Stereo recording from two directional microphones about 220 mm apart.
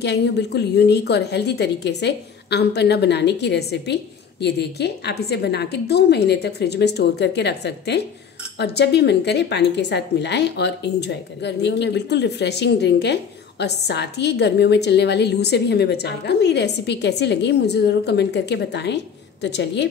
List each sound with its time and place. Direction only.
0.0 s a woman's voice: 50° left (ahead or behind)